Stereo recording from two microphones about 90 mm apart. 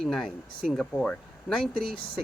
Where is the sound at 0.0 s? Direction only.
5° left (ahead or behind).